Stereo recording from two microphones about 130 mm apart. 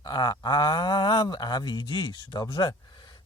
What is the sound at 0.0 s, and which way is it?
Speech, 35° left (ahead or behind).